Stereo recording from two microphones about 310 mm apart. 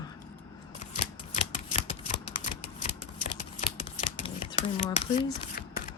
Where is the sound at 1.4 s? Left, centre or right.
Centre.